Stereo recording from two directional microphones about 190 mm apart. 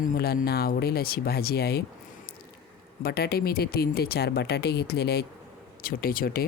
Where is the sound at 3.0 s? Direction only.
55° left (ahead or behind).